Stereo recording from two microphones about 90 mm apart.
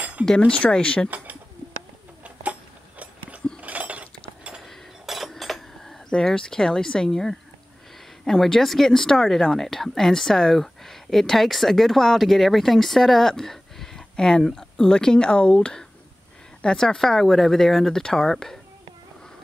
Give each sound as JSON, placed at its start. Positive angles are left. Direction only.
{"t": 0.4, "sound": "speech", "side_deg": 15}
{"t": 3.6, "sound": "chink", "side_deg": -15}
{"t": 4.6, "sound": "a sound", "side_deg": 0}
{"t": 8.3, "sound": "a woman's voice", "side_deg": 5}